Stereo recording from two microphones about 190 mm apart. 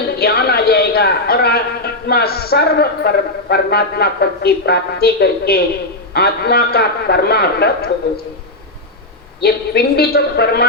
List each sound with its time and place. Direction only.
0.2 s a man's voice: 55° left (ahead or behind)
9.4 s a man's voice: 55° left (ahead or behind)